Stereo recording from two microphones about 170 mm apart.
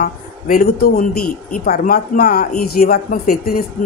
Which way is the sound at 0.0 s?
55° left (ahead or behind).